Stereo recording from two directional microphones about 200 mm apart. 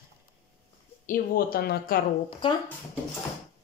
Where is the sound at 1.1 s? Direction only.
45° left (ahead or behind).